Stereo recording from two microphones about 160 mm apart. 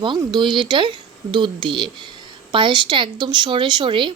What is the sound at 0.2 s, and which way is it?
Speech, 25° right (ahead or behind).